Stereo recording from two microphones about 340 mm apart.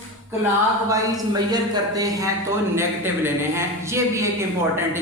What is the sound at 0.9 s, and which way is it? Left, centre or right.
A man's voice, centre.